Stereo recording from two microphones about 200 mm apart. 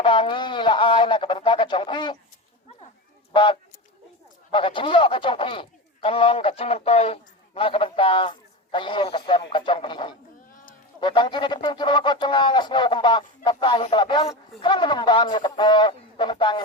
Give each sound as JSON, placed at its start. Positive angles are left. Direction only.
{"t": 0.0, "sound": "speech", "side_deg": 25}
{"t": 3.3, "sound": "speech", "side_deg": 25}